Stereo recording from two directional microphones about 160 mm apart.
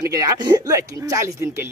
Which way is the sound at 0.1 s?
20° right (ahead or behind).